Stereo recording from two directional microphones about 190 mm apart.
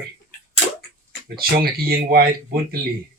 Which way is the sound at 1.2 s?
55° right (ahead or behind).